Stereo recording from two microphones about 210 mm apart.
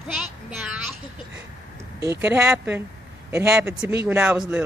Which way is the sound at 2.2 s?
10° right (ahead or behind).